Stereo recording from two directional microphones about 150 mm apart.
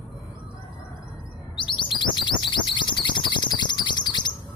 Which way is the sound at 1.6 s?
35° left (ahead or behind).